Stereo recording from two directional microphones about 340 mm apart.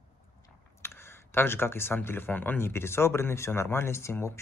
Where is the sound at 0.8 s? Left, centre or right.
Centre.